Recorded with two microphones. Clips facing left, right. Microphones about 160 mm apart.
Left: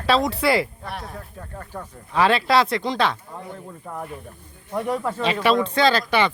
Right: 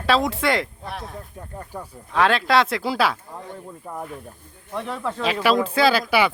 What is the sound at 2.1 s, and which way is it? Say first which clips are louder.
Speech: even; centre (ahead or behind).